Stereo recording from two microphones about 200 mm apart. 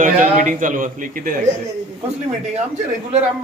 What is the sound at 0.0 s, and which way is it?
A man's voice, 40° right (ahead or behind).